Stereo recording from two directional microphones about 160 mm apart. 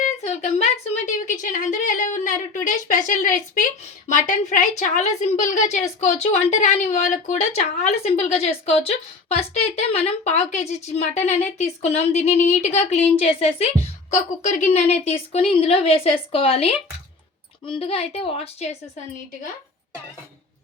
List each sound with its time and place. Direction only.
0.0 s a woman's voice: 50° left (ahead or behind)